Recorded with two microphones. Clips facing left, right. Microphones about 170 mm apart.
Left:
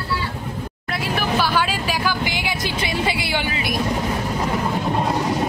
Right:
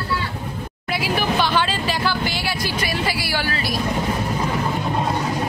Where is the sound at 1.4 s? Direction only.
10° left (ahead or behind).